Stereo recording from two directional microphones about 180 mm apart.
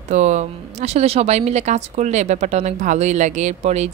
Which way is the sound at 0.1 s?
40° right (ahead or behind).